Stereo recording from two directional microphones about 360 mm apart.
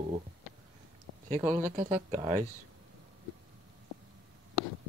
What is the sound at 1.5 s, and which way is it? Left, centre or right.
Speech, centre.